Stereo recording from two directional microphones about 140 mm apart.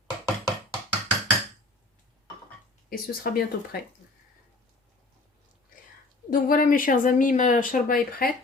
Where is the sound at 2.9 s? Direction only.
90° left.